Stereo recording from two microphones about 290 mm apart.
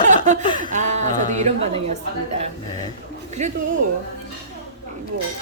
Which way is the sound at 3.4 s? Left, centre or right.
Right.